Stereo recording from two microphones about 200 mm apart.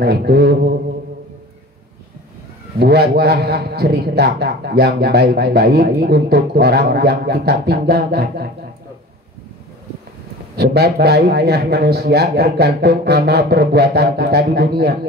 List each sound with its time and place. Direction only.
0.0 s a man's voice: 50° right (ahead or behind)
2.8 s a man's voice: 55° right (ahead or behind)
10.5 s a man's voice: 55° right (ahead or behind)